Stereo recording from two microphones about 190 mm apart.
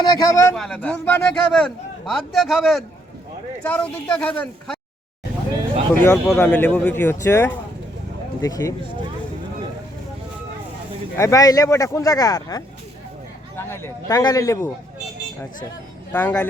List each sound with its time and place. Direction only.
0.0 s a man's voice: 20° left (ahead or behind)
0.5 s a man's voice: 5° left (ahead or behind)
5.9 s speech: 10° left (ahead or behind)
11.2 s speech: 15° left (ahead or behind)
16.1 s speech: 10° left (ahead or behind)